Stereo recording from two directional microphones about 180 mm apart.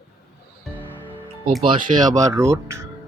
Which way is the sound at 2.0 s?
20° right (ahead or behind).